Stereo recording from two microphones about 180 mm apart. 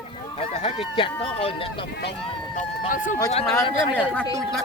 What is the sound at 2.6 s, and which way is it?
Speech, 45° left (ahead or behind).